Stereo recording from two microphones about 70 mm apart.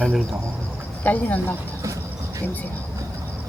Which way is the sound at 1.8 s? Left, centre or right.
Right.